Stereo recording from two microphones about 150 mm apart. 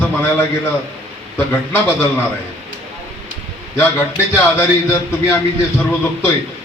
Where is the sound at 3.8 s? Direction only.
15° left (ahead or behind).